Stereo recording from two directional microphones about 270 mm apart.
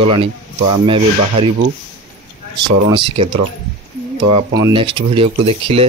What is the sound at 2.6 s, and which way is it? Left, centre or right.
Speech, centre.